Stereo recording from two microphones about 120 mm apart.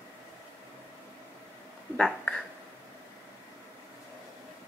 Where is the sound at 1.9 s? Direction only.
5° left (ahead or behind).